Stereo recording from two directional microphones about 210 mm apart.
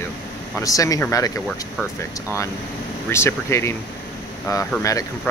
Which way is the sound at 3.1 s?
10° left (ahead or behind).